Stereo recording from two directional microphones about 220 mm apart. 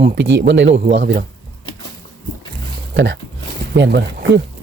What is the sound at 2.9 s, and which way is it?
Speech, 55° right (ahead or behind).